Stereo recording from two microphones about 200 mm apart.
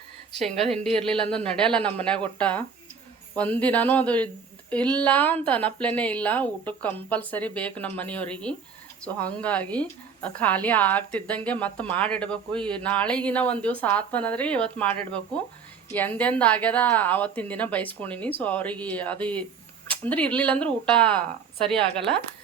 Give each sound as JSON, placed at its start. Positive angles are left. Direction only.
{"t": 0.4, "sound": "a woman's voice", "side_deg": 0}